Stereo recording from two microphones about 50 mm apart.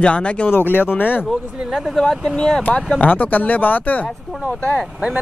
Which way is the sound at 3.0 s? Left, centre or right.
Left.